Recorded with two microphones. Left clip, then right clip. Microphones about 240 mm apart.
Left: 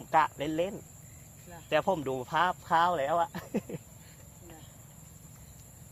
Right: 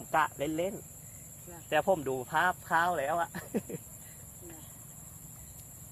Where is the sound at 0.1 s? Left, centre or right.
Left.